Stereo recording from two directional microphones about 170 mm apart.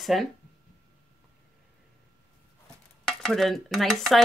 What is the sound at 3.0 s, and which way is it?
Cutlery, centre (ahead or behind).